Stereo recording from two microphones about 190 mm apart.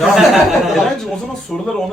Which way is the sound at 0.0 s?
Centre (ahead or behind).